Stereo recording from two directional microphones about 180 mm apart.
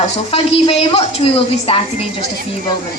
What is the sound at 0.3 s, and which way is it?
A woman's voice, 35° left (ahead or behind).